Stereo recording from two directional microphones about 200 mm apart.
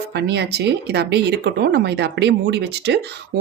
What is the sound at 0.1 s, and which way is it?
Speech, 55° right (ahead or behind).